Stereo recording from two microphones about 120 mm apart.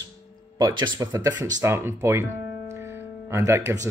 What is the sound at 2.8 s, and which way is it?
Music, 20° right (ahead or behind).